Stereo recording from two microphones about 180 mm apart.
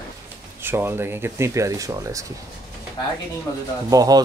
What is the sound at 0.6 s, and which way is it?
Speech, 10° right (ahead or behind).